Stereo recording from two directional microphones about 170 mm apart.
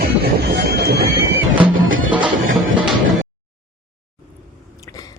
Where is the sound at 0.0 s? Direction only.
70° right (ahead or behind).